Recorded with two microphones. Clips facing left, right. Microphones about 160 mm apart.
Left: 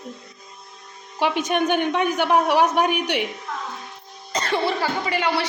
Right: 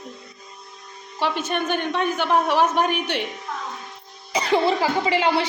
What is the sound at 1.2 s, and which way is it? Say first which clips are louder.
A man's voice: left 3 dB; 15° left (ahead or behind).